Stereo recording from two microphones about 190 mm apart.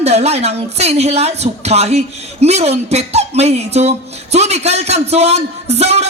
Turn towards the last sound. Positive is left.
turn(degrees=-35)  # may be behind; listen again after turning